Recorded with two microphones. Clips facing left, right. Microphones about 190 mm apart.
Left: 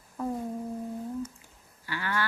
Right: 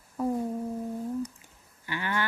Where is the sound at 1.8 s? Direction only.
20° right (ahead or behind).